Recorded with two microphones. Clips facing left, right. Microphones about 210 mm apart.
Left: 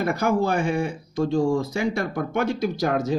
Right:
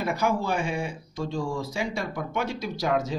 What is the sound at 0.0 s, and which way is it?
A man's voice, 50° left (ahead or behind).